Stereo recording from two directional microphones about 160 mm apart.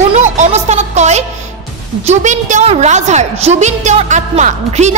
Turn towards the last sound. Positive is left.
turn(degrees=-45)  # may be behind; listen again after turning